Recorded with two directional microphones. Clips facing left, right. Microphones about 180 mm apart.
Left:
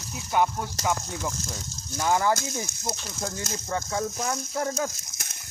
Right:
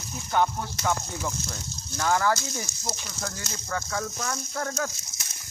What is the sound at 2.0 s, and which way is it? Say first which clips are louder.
Speech: left 1 dB; 15° left (ahead or behind).